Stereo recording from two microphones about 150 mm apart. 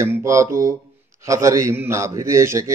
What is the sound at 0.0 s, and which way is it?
A man's voice, 20° right (ahead or behind).